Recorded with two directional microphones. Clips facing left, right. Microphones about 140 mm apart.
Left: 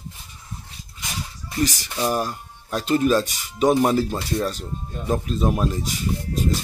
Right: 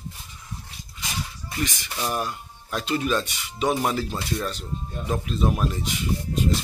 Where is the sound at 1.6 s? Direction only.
40° left (ahead or behind).